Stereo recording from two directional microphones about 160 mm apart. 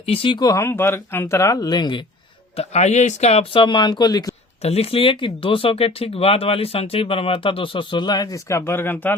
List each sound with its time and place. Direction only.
0.0 s speech: 35° left (ahead or behind)
2.6 s speech: 45° left (ahead or behind); by 4.4 s 25° left (ahead or behind)
4.6 s speech: 40° left (ahead or behind); by 9.1 s 10° left (ahead or behind)